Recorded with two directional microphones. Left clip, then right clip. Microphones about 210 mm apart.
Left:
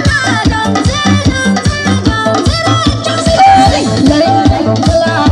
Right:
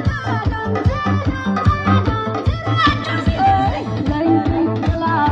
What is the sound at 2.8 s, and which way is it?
Music, 45° left (ahead or behind).